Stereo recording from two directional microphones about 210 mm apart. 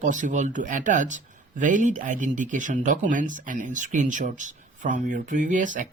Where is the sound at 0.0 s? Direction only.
35° right (ahead or behind).